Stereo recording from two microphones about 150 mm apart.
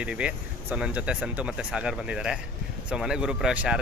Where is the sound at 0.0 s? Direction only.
10° right (ahead or behind).